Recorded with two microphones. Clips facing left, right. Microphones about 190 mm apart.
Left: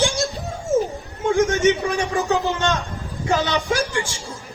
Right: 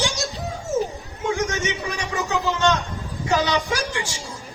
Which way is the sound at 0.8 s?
50° left (ahead or behind).